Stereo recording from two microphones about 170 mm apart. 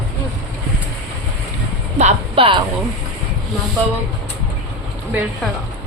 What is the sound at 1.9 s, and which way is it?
Speech, 35° right (ahead or behind).